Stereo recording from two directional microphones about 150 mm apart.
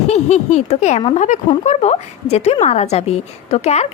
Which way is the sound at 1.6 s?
45° left (ahead or behind).